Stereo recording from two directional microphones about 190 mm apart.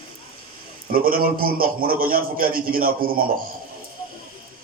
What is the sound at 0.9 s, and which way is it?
A man's voice, 50° right (ahead or behind).